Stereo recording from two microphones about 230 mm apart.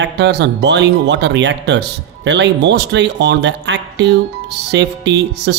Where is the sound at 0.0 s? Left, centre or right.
Right.